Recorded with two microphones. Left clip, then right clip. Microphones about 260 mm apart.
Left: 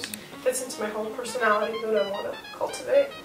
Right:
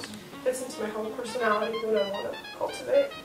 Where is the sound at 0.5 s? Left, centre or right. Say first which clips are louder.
Left 2 dB; centre.